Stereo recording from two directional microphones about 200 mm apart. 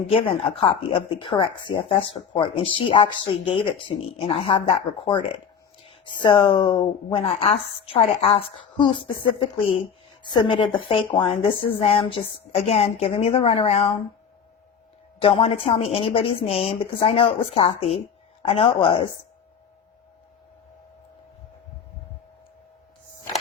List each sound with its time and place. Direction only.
0.1 s speech: 30° left (ahead or behind)
15.2 s speech: 30° left (ahead or behind)